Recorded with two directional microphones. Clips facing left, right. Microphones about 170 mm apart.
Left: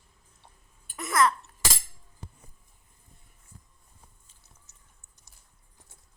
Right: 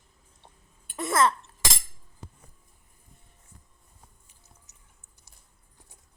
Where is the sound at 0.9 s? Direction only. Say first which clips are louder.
Right 1 dB; 25° right (ahead or behind).